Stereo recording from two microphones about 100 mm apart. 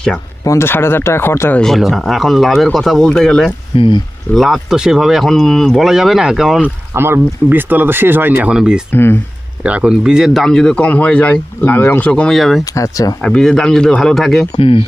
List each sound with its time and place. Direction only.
0.4 s speech: 25° left (ahead or behind)
1.5 s speech: 5° left (ahead or behind)
3.8 s speech: 55° left (ahead or behind)
4.4 s speech: centre (ahead or behind)
6.9 s speech: 25° right (ahead or behind)
8.5 s speech: 10° right (ahead or behind)
8.9 s speech: 20° left (ahead or behind)
9.6 s speech: 10° right (ahead or behind); by 12.4 s 10° left (ahead or behind)
12.4 s speech: centre (ahead or behind)
12.7 s speech: 35° left (ahead or behind)
13.2 s speech: 5° left (ahead or behind)
14.5 s speech: 70° left (ahead or behind)